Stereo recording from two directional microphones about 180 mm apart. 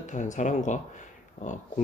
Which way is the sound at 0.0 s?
45° left (ahead or behind).